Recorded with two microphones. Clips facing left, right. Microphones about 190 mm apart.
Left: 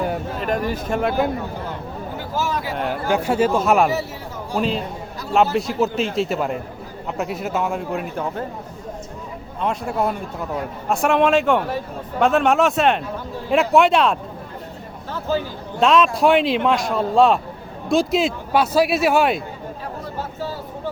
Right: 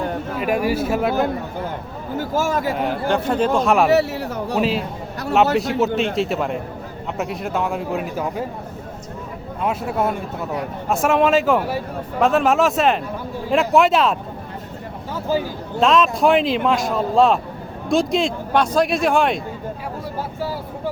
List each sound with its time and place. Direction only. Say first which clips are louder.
0.3 s speech: right 7 dB; 10° right (ahead or behind)
2.1 s speech: right 5 dB; 45° right (ahead or behind)
2.7 s a man's voice: right 1 dB; 5° left (ahead or behind)
3.9 s speech: right 8 dB; 70° right (ahead or behind)
5.5 s a man's voice: right 1 dB; centre (ahead or behind)
9.6 s a man's voice: right 1 dB; 5° right (ahead or behind)
15.3 s speech: right 1 dB; 10° right (ahead or behind)
15.8 s a man's voice: even; centre (ahead or behind)
20.4 s vehicle: right 3 dB; 10° right (ahead or behind)